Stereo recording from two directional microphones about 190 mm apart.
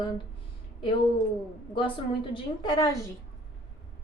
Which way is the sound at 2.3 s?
20° left (ahead or behind).